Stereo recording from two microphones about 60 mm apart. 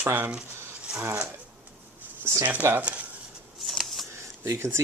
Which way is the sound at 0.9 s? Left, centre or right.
Centre.